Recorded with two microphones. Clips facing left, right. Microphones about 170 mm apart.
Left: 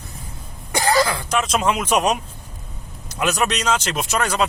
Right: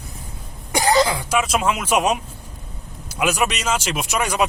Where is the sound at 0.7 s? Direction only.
15° right (ahead or behind).